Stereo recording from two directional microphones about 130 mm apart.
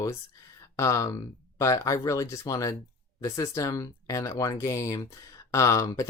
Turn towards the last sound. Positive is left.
turn(degrees=25)  # may be behind; listen again after turning